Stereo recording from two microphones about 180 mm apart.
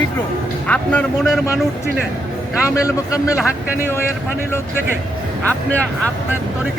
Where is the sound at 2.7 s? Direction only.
20° left (ahead or behind).